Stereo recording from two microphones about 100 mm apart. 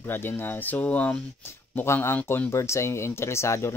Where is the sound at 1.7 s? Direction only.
25° left (ahead or behind).